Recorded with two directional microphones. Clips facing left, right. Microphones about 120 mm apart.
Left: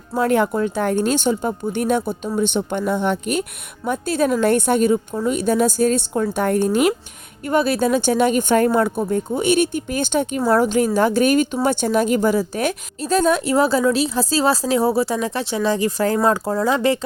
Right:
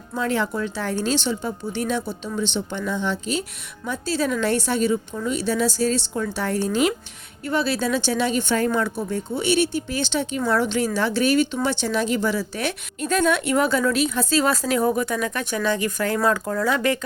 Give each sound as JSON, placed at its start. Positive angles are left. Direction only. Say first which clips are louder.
{"t": 0.1, "sound": "a woman's voice", "louder": "left 6 dB", "side_deg": 50}